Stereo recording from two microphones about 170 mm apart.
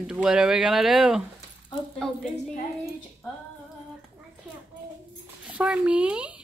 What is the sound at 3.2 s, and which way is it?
Female singing, 15° left (ahead or behind).